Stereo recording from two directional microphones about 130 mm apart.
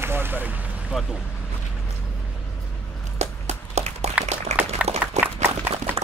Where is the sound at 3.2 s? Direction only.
60° right (ahead or behind).